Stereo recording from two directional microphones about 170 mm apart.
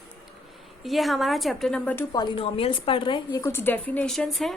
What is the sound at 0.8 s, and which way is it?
A woman's voice, centre (ahead or behind).